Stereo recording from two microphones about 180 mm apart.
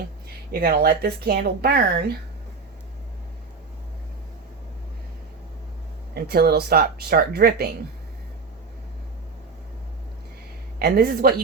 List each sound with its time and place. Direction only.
0.5 s speech: 60° right (ahead or behind)
6.1 s speech: 60° right (ahead or behind)
10.8 s speech: 60° right (ahead or behind)